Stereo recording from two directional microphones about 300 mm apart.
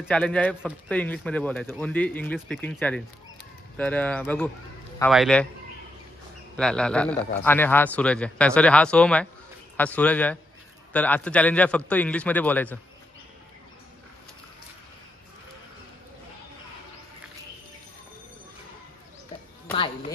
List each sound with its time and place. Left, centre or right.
0.0 s speech: centre
6.5 s speech: centre
19.7 s speech: centre